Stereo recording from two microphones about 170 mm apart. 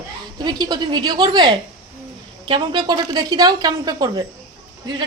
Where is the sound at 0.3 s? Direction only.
25° right (ahead or behind).